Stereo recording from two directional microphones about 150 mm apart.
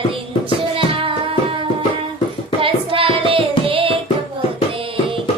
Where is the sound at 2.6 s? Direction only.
35° right (ahead or behind).